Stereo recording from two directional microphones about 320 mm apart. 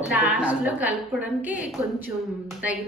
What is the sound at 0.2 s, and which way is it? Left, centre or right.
Speech, centre.